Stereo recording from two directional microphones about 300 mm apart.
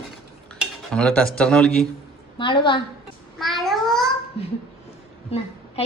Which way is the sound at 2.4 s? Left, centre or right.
Centre.